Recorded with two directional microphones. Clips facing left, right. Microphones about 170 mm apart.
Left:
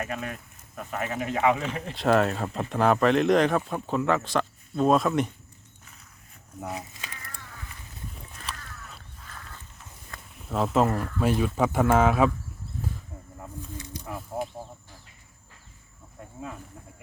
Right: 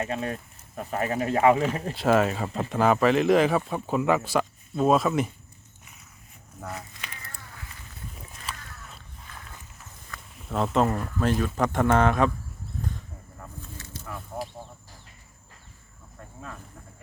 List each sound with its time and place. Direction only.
0.0 s speech: 30° right (ahead or behind)
1.9 s speech: centre (ahead or behind)
6.6 s speech: 15° left (ahead or behind)
8.1 s a sound: centre (ahead or behind)
10.3 s speech: centre (ahead or behind)
13.4 s a sound: 15° left (ahead or behind)